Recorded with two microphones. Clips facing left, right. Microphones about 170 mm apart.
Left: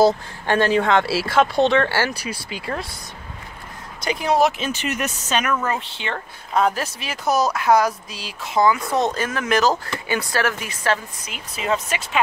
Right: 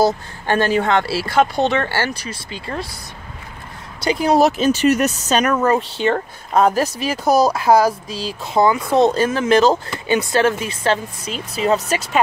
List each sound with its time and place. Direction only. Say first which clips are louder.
0.0 s speech: left 1 dB; centre (ahead or behind)
4.0 s speech: right 4 dB; 35° right (ahead or behind)